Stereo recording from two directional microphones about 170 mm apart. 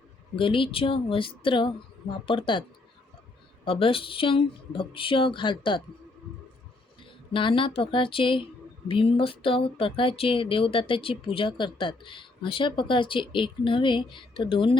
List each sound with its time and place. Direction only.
0.3 s speech: 30° left (ahead or behind)
7.3 s speech: 30° left (ahead or behind)